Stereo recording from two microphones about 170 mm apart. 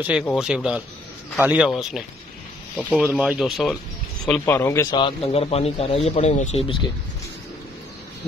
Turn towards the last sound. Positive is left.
turn(degrees=35)  # may be behind; listen again after turning